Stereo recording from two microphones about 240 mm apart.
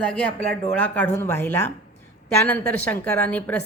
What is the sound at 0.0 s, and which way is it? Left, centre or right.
A woman's voice, centre.